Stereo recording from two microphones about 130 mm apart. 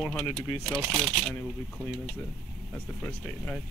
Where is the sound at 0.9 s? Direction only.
Centre (ahead or behind).